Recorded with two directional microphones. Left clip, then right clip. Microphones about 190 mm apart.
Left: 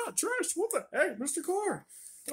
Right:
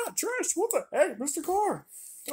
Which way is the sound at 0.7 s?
10° right (ahead or behind).